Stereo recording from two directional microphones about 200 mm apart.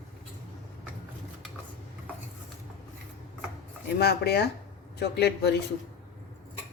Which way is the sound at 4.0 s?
55° left (ahead or behind).